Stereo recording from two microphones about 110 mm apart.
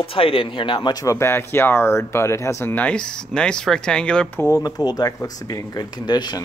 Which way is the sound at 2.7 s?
10° left (ahead or behind).